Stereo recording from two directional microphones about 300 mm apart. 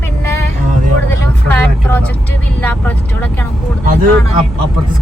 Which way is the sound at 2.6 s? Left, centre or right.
Centre.